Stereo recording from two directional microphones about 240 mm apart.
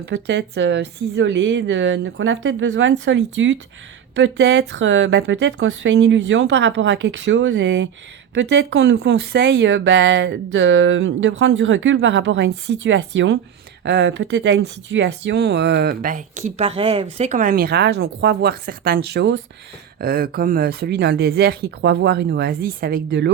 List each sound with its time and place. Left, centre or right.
0.0 s speech: right